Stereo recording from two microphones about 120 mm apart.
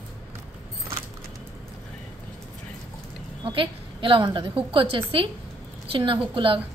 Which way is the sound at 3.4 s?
45° right (ahead or behind).